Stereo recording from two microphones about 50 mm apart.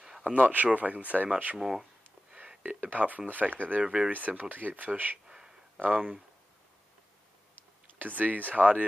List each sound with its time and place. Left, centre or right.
0.2 s speech: right
1.6 s speech: centre
2.8 s speech: right
3.8 s speech: centre
4.1 s speech: right
5.2 s a sound: centre
5.8 s speech: right
7.8 s speech: right